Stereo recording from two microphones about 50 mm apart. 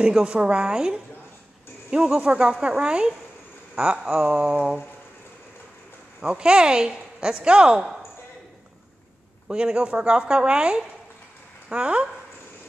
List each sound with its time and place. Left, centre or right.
0.0 s a woman's voice: right
6.2 s a woman's voice: centre
9.5 s a woman's voice: centre